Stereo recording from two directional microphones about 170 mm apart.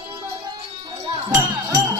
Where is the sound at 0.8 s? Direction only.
25° right (ahead or behind).